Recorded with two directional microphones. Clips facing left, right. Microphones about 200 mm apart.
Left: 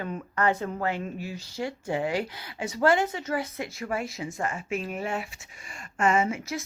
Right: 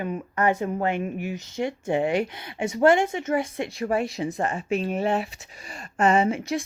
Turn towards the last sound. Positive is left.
turn(degrees=-30)  # may be behind; listen again after turning